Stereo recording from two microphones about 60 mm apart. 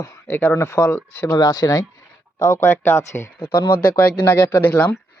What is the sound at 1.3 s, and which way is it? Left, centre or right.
Speech, left.